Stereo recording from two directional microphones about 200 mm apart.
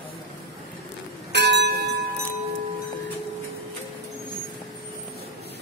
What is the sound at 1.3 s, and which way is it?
Bell, 60° right (ahead or behind).